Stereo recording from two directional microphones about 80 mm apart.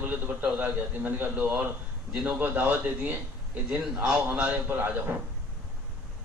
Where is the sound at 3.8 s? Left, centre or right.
Centre.